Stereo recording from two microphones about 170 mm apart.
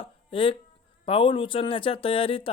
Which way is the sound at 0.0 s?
30° left (ahead or behind).